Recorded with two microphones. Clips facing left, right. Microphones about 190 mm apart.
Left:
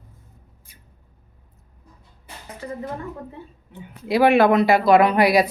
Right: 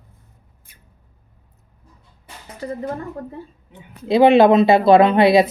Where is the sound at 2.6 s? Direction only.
35° right (ahead or behind).